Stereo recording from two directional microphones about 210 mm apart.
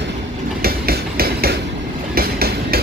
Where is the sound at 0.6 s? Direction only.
45° right (ahead or behind).